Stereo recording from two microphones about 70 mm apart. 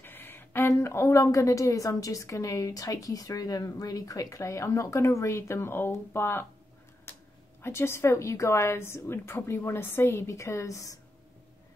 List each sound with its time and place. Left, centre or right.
0.0 s a woman's voice: left
4.4 s a woman's voice: left
7.6 s a woman's voice: left